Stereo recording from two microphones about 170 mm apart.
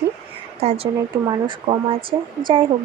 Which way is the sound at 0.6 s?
35° right (ahead or behind).